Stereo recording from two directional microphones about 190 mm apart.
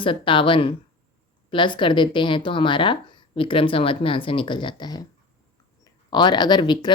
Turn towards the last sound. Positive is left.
turn(degrees=25)  # may be behind; listen again after turning